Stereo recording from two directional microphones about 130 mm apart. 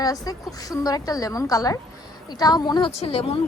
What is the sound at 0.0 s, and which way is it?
A woman's voice, 30° left (ahead or behind).